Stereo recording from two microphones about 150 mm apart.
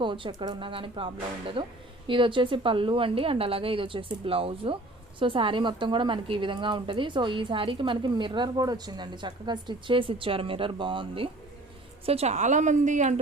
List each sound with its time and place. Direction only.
0.0 s a woman's voice: 30° right (ahead or behind); by 13.1 s 55° right (ahead or behind)